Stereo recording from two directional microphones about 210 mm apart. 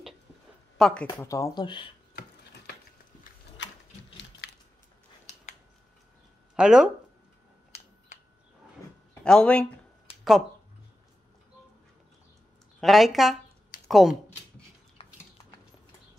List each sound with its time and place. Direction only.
0.7 s speech: centre (ahead or behind)
1.0 s speech: 15° left (ahead or behind)
3.6 s ratchet: 60° left (ahead or behind)
4.4 s a sound: 50° left (ahead or behind)
5.2 s a sound: 35° left (ahead or behind)
6.5 s speech: 5° right (ahead or behind)
9.2 s speech: 5° left (ahead or behind)
12.8 s speech: centre (ahead or behind)
15.0 s a sound: 25° left (ahead or behind)